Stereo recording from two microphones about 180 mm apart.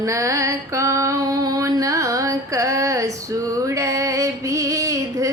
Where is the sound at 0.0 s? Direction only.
15° right (ahead or behind).